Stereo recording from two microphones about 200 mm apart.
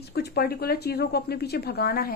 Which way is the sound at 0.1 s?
50° left (ahead or behind).